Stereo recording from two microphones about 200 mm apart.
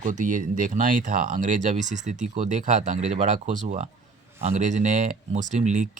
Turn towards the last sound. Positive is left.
turn(degrees=-35)  # may be behind; listen again after turning